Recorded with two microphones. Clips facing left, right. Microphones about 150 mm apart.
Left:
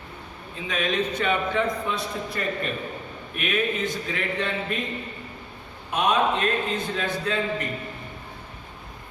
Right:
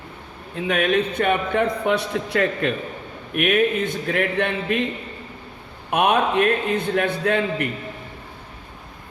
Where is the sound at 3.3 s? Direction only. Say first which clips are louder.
Right 7 dB; 60° right (ahead or behind).